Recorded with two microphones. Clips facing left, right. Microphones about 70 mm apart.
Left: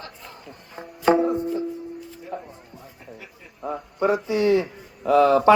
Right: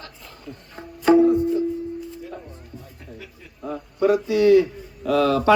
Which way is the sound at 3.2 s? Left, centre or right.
Left.